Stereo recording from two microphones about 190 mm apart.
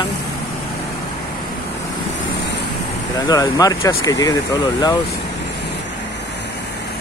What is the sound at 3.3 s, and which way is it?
Speech, 20° left (ahead or behind).